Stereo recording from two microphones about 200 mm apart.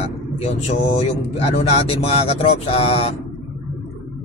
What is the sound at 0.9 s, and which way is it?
Speech, 30° left (ahead or behind).